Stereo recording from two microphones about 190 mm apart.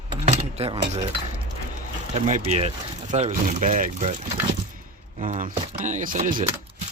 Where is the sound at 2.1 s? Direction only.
35° right (ahead or behind).